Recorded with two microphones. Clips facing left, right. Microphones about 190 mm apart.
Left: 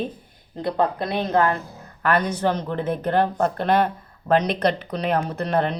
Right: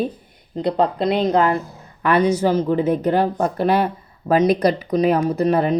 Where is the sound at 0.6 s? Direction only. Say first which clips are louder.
Right 4 dB; 20° right (ahead or behind).